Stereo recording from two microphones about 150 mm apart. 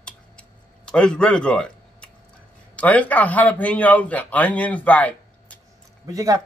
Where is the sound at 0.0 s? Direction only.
5° left (ahead or behind).